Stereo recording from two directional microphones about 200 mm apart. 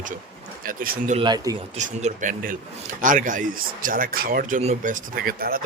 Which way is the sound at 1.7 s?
35° right (ahead or behind).